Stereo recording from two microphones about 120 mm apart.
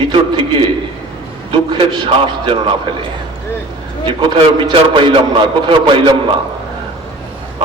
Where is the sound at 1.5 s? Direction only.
40° right (ahead or behind).